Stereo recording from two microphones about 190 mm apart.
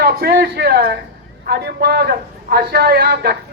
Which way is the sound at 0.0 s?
55° right (ahead or behind).